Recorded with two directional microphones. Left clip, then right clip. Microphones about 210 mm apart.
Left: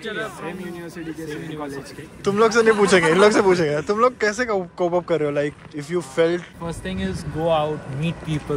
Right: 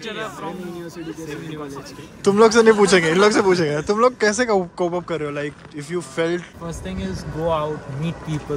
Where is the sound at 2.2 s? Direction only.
25° right (ahead or behind).